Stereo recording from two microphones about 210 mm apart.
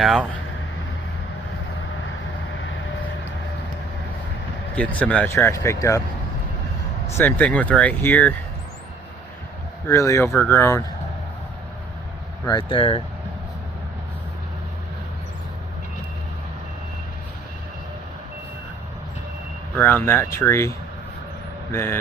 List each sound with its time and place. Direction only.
0.0 s speech: centre (ahead or behind)
4.7 s speech: 5° left (ahead or behind)
7.1 s speech: 10° left (ahead or behind)
9.8 s speech: 15° left (ahead or behind)
12.5 s speech: 20° left (ahead or behind)
19.7 s speech: 10° left (ahead or behind)